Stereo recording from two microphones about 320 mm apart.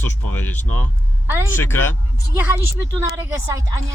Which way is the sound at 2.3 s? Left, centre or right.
Centre.